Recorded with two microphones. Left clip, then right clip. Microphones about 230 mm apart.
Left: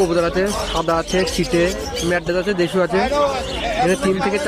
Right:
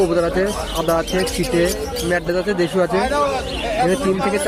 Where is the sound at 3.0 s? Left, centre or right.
Right.